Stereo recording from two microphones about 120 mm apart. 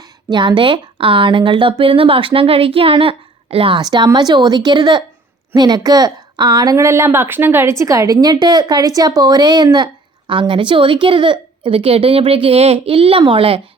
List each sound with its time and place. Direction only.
0.3 s a woman's voice: 40° right (ahead or behind)
3.8 s a woman's voice: 35° right (ahead or behind)